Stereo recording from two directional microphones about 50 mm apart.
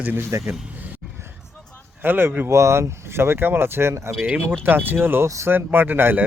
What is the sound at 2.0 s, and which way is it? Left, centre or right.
Speech, right.